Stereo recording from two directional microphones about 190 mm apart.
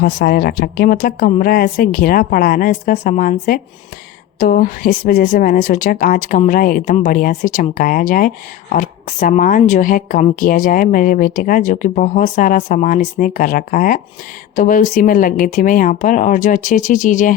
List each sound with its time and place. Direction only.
0.0 s a woman's voice: 55° left (ahead or behind)